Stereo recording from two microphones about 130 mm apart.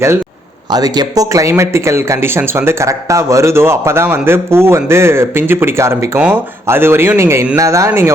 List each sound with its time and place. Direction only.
0.7 s speech: 30° right (ahead or behind)